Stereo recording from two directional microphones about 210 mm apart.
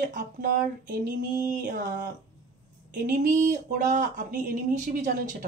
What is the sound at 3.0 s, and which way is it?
Speech, 40° right (ahead or behind).